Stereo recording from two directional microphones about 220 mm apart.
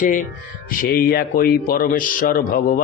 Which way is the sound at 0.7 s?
40° left (ahead or behind).